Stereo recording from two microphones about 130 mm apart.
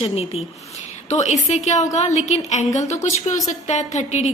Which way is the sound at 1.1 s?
60° left (ahead or behind).